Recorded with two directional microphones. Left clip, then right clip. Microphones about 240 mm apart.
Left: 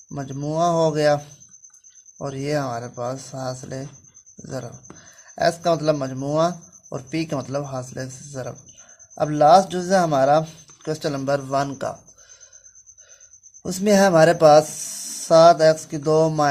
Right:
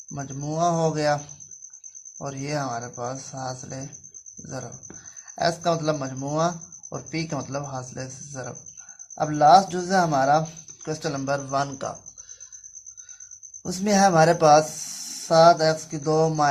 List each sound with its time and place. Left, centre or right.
0.1 s speech: left
13.7 s speech: left